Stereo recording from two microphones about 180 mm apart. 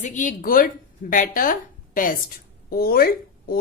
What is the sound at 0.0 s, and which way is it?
Speech, 45° left (ahead or behind).